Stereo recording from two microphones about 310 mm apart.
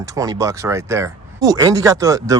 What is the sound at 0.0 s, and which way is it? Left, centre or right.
Speech, centre.